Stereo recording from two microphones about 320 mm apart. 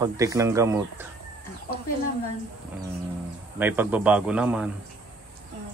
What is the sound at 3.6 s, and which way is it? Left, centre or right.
A man's voice, centre.